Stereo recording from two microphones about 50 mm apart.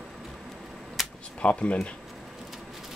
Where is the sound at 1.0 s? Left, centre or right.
Centre.